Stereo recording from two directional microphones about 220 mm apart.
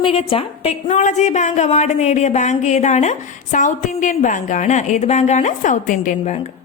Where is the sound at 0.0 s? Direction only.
25° left (ahead or behind).